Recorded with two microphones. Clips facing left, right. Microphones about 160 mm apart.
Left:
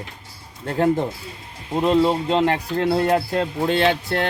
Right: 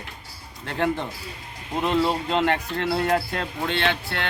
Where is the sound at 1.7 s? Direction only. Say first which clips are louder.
Left 5 dB; 30° left (ahead or behind).